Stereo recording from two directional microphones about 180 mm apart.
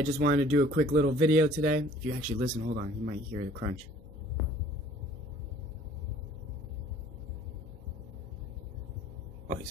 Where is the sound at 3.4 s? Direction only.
70° right (ahead or behind).